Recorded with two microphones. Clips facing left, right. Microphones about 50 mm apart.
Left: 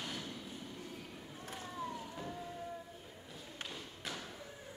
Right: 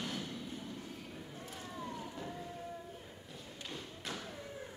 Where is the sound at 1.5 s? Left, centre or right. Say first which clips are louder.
Left 2 dB; centre.